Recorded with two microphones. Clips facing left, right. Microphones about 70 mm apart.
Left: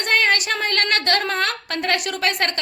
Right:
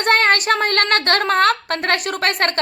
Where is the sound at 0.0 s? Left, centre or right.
Right.